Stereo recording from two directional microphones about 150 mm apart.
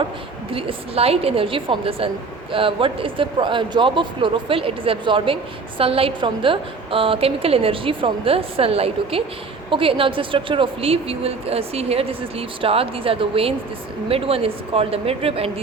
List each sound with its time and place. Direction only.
0.5 s speech: 40° right (ahead or behind)